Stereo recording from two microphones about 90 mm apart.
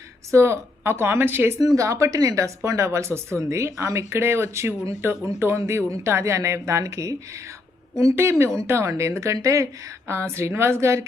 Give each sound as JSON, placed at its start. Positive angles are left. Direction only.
{"t": 0.3, "sound": "a woman's voice", "side_deg": -30}
{"t": 1.5, "sound": "a woman's voice", "side_deg": -35}